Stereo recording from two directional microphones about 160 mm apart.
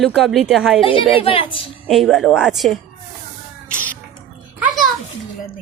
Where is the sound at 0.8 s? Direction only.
35° left (ahead or behind).